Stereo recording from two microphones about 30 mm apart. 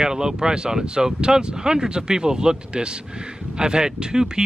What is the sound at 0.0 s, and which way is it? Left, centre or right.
Speech, right.